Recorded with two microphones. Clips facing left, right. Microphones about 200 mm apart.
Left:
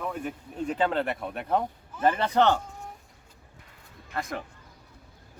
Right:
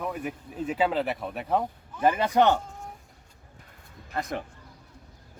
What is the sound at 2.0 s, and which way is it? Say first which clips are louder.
Speech: right 1 dB; 10° right (ahead or behind).